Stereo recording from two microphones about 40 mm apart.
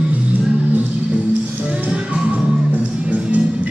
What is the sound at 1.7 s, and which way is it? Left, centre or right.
Music, right.